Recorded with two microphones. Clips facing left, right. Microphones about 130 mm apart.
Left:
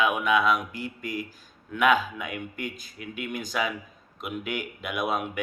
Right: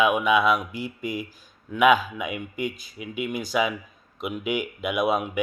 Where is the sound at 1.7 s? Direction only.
10° right (ahead or behind).